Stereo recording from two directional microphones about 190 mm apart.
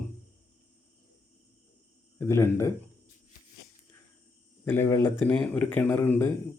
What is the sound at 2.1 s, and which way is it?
Speech, 10° left (ahead or behind).